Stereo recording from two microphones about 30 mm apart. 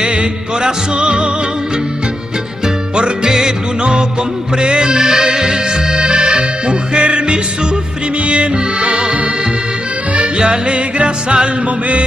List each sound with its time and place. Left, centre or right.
0.0 s music: right
3.3 s music: right
4.6 s accordion: right
8.3 s music: right
10.3 s music: right